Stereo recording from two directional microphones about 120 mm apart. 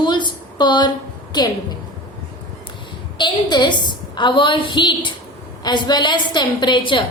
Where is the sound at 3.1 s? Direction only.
35° left (ahead or behind).